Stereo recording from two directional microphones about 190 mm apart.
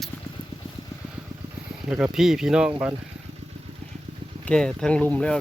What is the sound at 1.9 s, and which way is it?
Speech, 5° right (ahead or behind).